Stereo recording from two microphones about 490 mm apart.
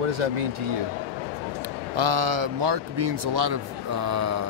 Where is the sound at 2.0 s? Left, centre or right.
Right.